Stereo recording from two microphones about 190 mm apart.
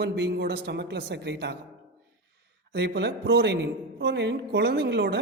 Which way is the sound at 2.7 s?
60° right (ahead or behind).